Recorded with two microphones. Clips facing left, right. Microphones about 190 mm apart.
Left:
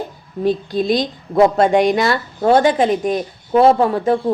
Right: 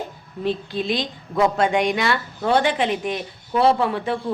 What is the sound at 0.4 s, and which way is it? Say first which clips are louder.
A woman's voice: left 6 dB; 40° left (ahead or behind).